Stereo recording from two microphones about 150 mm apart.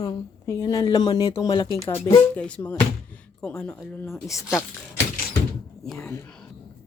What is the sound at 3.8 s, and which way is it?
Speech, 15° left (ahead or behind).